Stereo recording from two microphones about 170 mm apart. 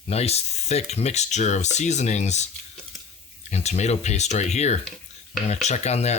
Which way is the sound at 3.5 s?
40° left (ahead or behind).